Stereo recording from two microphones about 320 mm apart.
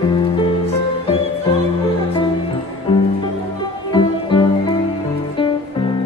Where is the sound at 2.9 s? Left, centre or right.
Centre.